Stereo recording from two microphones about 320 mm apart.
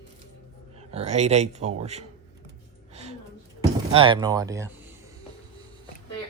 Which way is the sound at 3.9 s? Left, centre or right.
Centre.